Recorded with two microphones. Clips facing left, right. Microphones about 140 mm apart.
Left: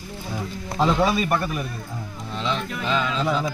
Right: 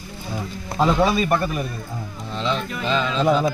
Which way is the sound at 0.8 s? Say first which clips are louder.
Right 2 dB; 10° right (ahead or behind).